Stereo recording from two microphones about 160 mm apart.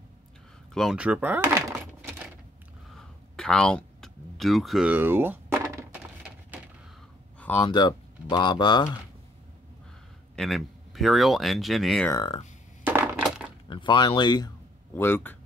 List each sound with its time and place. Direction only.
0.7 s a sound: 5° right (ahead or behind)
3.3 s a sound: 5° left (ahead or behind); by 5.9 s 15° right (ahead or behind)
7.3 s a sound: 10° left (ahead or behind)
7.6 s speech: 25° left (ahead or behind)
10.3 s speech: centre (ahead or behind)
12.1 s speech: 25° left (ahead or behind)
12.8 s coin: 10° right (ahead or behind)
13.7 s speech: 30° left (ahead or behind)
15.0 s speech: 15° left (ahead or behind)